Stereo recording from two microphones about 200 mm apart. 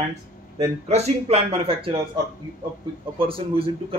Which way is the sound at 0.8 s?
30° right (ahead or behind).